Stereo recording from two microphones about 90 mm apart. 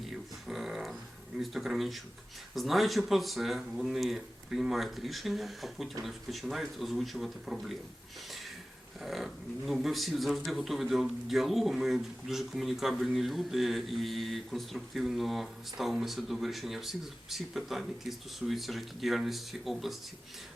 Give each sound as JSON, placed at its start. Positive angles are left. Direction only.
{"t": 0.0, "sound": "didgeridoo", "side_deg": 0}
{"t": 1.4, "sound": "speech", "side_deg": 0}
{"t": 9.0, "sound": "speech", "side_deg": 0}